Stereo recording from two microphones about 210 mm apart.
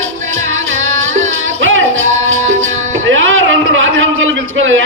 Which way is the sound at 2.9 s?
65° right (ahead or behind).